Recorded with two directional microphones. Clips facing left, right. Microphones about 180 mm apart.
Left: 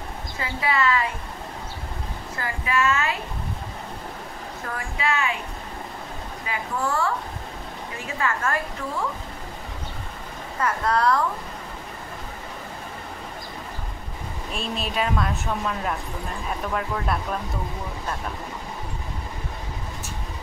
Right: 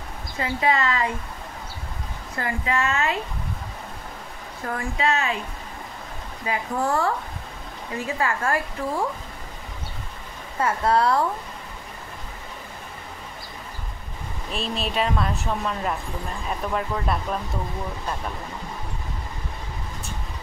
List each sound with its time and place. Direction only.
0.4 s speech: 35° right (ahead or behind)
2.4 s speech: 30° right (ahead or behind)
4.6 s speech: 35° right (ahead or behind)
6.4 s speech: 30° right (ahead or behind)
8.2 s speech: 30° right (ahead or behind)
10.6 s speech: 30° right (ahead or behind)
14.5 s speech: centre (ahead or behind)